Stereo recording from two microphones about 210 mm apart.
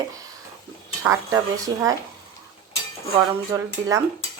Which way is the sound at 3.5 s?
15° right (ahead or behind).